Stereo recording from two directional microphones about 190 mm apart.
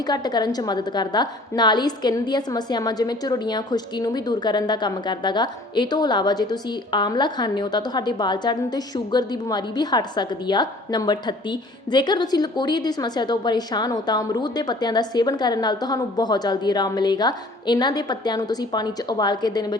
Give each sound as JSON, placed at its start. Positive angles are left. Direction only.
{"t": 0.1, "sound": "a woman's voice", "side_deg": 20}